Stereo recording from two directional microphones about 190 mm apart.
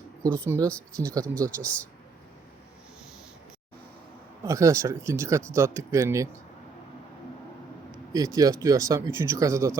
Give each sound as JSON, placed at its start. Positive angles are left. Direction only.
{"t": 0.3, "sound": "speech", "side_deg": -15}
{"t": 0.7, "sound": "speech", "side_deg": 5}
{"t": 4.4, "sound": "speech", "side_deg": -15}
{"t": 8.1, "sound": "speech", "side_deg": -20}